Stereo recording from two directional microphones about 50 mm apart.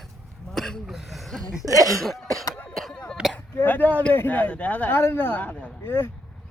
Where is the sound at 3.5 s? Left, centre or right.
Left.